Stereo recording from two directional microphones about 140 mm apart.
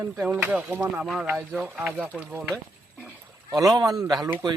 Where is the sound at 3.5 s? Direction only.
25° right (ahead or behind).